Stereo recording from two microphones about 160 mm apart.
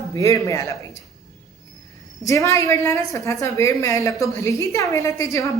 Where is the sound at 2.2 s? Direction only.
20° left (ahead or behind).